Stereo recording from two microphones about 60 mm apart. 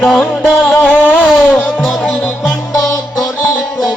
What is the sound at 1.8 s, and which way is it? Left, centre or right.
Music, centre.